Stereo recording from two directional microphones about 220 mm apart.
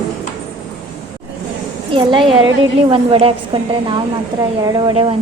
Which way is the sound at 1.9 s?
20° right (ahead or behind).